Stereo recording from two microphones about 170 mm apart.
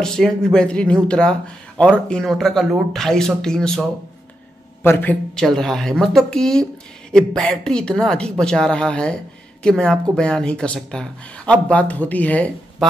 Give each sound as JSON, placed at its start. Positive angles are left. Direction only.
{"t": 0.0, "sound": "speech", "side_deg": 5}
{"t": 4.8, "sound": "speech", "side_deg": 10}